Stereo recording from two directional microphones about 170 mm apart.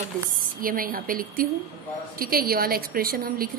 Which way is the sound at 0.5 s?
55° right (ahead or behind).